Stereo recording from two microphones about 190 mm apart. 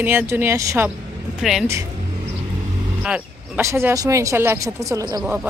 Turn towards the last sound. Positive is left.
turn(degrees=-5)  # may be behind; listen again after turning